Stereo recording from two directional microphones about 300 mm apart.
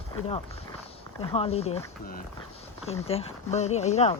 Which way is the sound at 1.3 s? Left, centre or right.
Centre.